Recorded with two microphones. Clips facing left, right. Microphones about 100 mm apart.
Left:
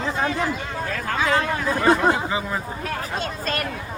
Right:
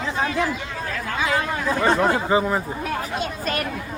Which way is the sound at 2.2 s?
30° right (ahead or behind).